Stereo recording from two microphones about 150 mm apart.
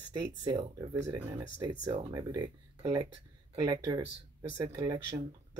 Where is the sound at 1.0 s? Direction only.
20° right (ahead or behind).